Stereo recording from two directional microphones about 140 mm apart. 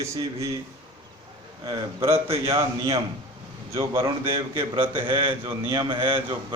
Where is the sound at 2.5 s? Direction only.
20° right (ahead or behind).